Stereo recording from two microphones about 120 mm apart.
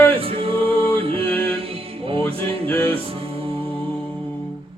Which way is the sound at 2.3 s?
50° right (ahead or behind).